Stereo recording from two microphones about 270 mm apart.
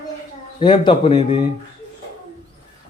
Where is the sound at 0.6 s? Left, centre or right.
Centre.